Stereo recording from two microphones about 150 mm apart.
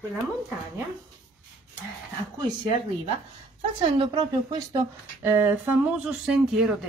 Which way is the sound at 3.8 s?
35° right (ahead or behind).